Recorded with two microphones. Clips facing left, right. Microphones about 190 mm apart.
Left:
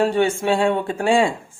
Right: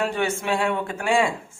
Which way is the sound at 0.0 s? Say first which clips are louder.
Left 6 dB; 30° left (ahead or behind).